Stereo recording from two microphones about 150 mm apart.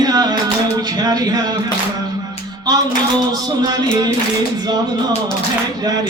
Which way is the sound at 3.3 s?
25° right (ahead or behind).